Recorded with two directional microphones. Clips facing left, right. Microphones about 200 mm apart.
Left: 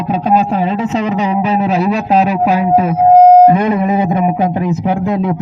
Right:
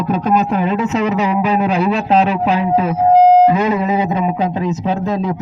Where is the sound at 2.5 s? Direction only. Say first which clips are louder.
Left 3 dB; 45° left (ahead or behind).